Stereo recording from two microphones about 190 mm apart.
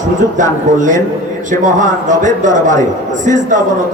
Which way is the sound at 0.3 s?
40° right (ahead or behind).